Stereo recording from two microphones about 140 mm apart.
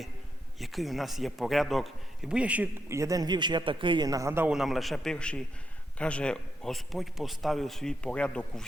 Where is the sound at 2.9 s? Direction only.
25° right (ahead or behind).